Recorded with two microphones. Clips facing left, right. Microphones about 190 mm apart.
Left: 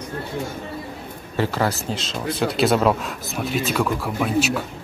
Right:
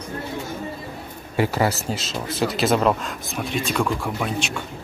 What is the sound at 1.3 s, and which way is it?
A man's voice, 10° right (ahead or behind).